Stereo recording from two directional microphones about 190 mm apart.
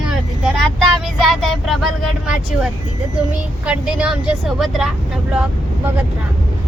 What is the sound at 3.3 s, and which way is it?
Speech, 5° right (ahead or behind).